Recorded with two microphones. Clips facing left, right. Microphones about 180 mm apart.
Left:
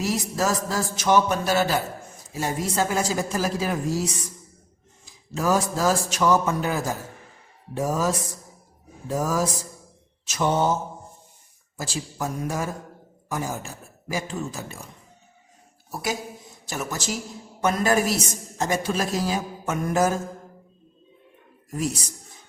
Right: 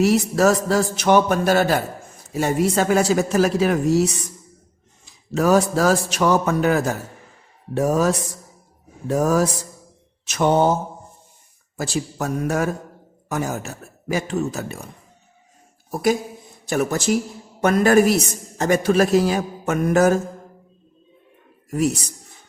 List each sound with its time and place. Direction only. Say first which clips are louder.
0.0 s a man's voice: right 9 dB; 65° right (ahead or behind)
2.3 s speech: right 7 dB; 65° right (ahead or behind)
5.3 s a man's voice: right 6 dB; 65° right (ahead or behind)
12.2 s speech: right 5 dB; 70° right (ahead or behind)
15.9 s a man's voice: right 9 dB; 55° right (ahead or behind)
21.7 s a woman's voice: right 7 dB; 65° right (ahead or behind)